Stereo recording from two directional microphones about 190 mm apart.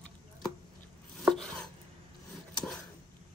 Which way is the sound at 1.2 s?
Centre (ahead or behind).